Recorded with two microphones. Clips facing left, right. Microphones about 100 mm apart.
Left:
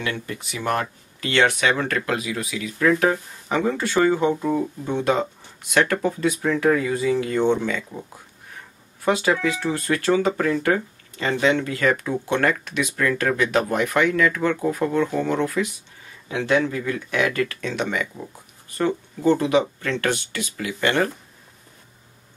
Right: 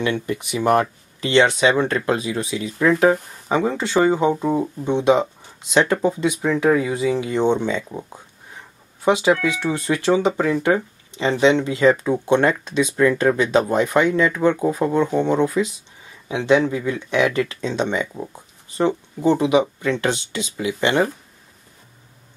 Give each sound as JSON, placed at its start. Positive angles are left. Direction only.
{"t": 0.0, "sound": "speech", "side_deg": -20}